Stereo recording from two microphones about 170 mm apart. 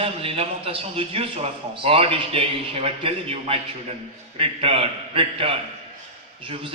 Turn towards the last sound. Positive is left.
turn(degrees=-35)  # may be behind; listen again after turning